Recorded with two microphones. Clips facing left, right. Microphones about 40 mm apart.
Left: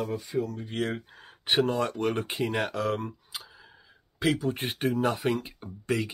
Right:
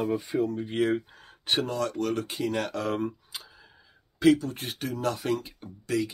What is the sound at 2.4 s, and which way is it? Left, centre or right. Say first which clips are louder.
Speech: right 2 dB; centre.